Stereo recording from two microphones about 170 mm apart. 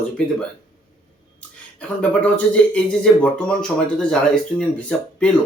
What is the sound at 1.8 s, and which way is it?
Speech, 5° left (ahead or behind).